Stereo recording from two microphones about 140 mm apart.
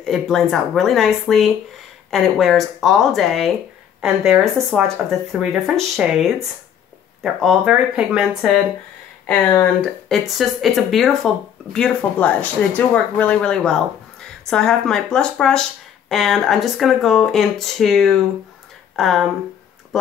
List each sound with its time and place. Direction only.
0.0 s speech: centre (ahead or behind)
7.6 s speech: 5° right (ahead or behind)
9.2 s speech: 10° left (ahead or behind)